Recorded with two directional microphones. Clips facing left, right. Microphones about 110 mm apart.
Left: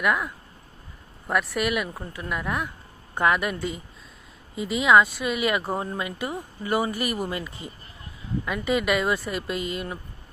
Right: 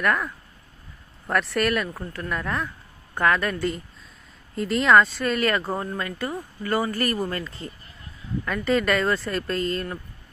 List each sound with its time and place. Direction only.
0.0 s speech: 10° left (ahead or behind)
4.6 s speech: 5° left (ahead or behind)